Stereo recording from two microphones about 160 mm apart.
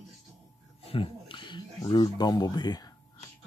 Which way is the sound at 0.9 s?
35° left (ahead or behind).